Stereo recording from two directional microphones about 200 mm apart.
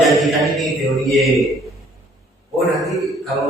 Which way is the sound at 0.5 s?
Centre (ahead or behind).